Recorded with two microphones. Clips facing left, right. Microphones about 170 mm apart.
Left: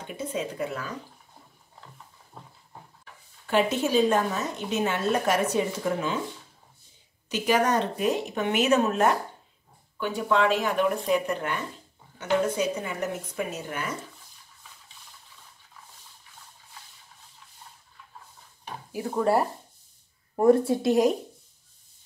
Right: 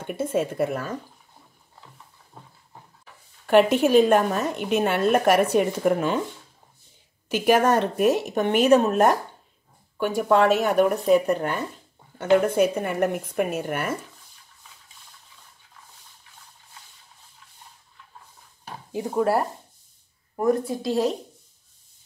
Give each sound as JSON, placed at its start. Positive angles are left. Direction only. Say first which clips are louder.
{"t": 0.0, "sound": "speech", "louder": "right 7 dB", "side_deg": -50}
{"t": 3.4, "sound": "speech", "louder": "right 7 dB", "side_deg": -60}
{"t": 7.2, "sound": "speech", "louder": "right 5 dB", "side_deg": -55}
{"t": 8.3, "sound": "speech", "louder": "right 6 dB", "side_deg": -40}
{"t": 12.2, "sound": "speech", "louder": "right 6 dB", "side_deg": -55}
{"t": 18.9, "sound": "speech", "louder": "right 3 dB", "side_deg": -20}
{"t": 19.1, "sound": "speech", "louder": "right 1 dB", "side_deg": -5}
{"t": 20.3, "sound": "speech", "louder": "left 3 dB", "side_deg": 30}